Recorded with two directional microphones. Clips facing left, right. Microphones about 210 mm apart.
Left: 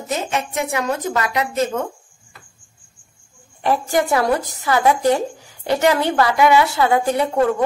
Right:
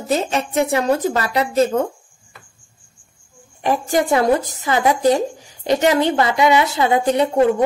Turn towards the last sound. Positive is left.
turn(degrees=-20)  # may be behind; listen again after turning